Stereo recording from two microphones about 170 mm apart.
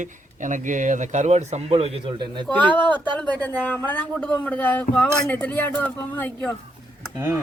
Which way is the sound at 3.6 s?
10° left (ahead or behind).